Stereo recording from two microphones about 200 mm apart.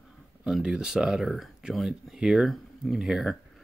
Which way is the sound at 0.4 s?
5° right (ahead or behind).